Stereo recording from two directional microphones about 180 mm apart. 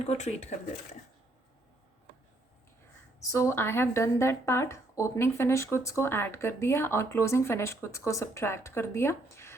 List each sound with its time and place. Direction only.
0.0 s speech: 40° left (ahead or behind)
3.2 s a woman's voice: 15° left (ahead or behind)